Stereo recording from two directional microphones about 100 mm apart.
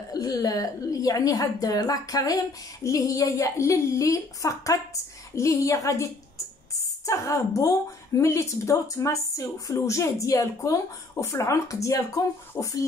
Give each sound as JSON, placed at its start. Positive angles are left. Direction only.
{"t": 0.1, "sound": "a woman's voice", "side_deg": 40}